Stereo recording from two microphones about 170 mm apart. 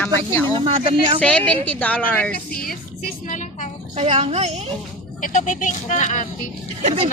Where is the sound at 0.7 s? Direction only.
35° right (ahead or behind).